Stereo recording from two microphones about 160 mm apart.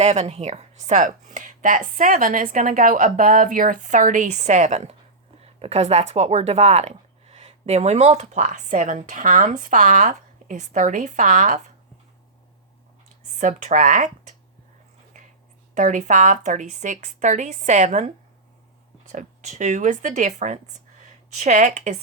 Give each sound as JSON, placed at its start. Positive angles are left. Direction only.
{"t": 0.0, "sound": "speech", "side_deg": -45}
{"t": 13.3, "sound": "speech", "side_deg": -45}
{"t": 15.1, "sound": "a sound", "side_deg": -50}
{"t": 15.7, "sound": "speech", "side_deg": -50}